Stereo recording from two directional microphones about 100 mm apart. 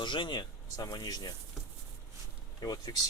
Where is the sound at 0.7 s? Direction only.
40° left (ahead or behind).